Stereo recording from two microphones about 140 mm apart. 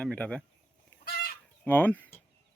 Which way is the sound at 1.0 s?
90° left.